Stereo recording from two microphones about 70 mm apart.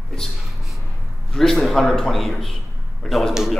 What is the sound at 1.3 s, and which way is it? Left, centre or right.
A man's voice, centre.